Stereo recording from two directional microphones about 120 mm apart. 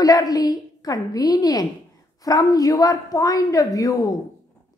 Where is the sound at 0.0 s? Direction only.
30° left (ahead or behind).